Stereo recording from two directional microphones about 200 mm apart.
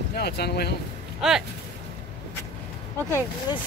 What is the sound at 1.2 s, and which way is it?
Speech, 5° right (ahead or behind).